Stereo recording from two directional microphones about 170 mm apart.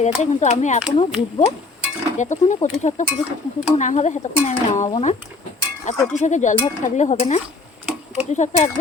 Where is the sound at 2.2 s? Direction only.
45° left (ahead or behind).